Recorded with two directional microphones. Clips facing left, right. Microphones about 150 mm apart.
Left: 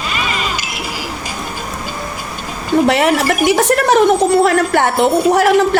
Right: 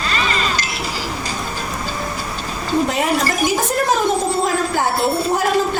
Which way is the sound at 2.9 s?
75° left (ahead or behind).